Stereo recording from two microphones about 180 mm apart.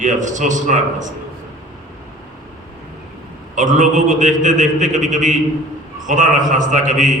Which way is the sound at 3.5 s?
45° right (ahead or behind).